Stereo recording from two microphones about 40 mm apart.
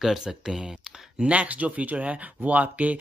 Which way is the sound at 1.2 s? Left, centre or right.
Right.